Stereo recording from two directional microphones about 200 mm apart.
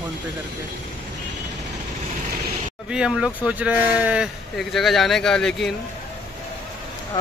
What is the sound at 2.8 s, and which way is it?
Speech, 5° right (ahead or behind).